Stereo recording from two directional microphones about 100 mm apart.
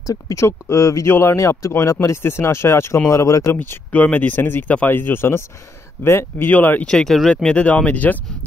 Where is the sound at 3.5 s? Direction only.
20° left (ahead or behind).